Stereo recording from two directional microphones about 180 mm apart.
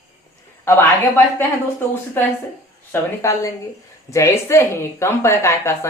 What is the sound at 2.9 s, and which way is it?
A woman's voice, 15° left (ahead or behind).